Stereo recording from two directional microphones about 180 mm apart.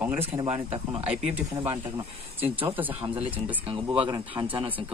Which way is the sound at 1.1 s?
10° right (ahead or behind).